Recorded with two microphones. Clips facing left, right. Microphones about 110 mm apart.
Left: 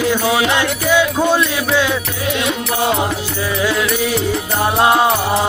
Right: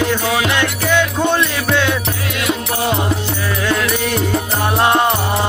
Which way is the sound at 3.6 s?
5° left (ahead or behind).